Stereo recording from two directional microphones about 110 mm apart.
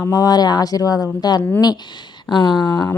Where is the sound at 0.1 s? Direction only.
35° left (ahead or behind).